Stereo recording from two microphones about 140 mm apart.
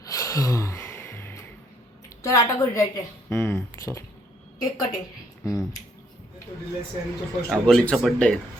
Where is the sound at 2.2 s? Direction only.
25° left (ahead or behind).